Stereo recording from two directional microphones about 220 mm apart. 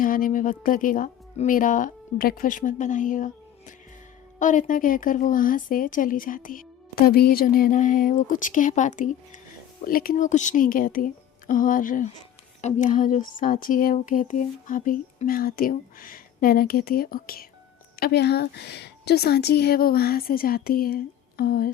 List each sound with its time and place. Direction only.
0.0 s a woman's voice: 40° left (ahead or behind)